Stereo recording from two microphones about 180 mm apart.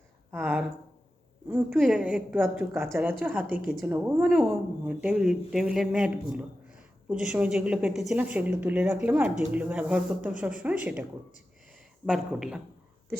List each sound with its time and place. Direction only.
0.3 s speech: 10° right (ahead or behind)
1.7 s speech: centre (ahead or behind)
12.0 s speech: 5° right (ahead or behind)